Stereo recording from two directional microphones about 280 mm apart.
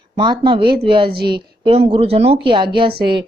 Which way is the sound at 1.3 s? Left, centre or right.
Centre.